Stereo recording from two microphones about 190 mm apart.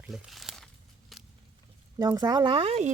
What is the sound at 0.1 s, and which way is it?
Speech, centre (ahead or behind).